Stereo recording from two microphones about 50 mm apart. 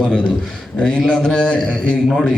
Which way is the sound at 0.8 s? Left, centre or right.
Centre.